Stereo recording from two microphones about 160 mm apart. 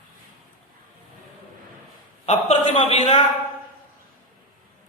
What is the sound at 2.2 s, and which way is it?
Speech, 40° left (ahead or behind).